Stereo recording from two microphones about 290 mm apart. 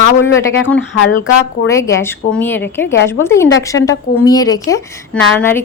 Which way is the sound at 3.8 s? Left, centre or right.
Left.